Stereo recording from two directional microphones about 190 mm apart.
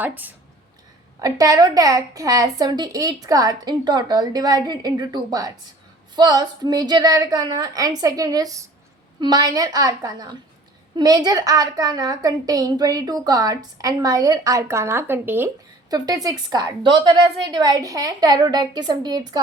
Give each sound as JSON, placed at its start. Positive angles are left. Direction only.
{"t": 0.0, "sound": "a woman's voice", "side_deg": -10}